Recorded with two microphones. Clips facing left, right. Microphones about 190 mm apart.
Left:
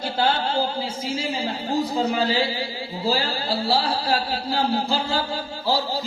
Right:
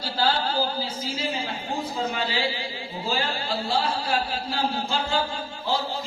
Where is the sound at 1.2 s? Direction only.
30° left (ahead or behind).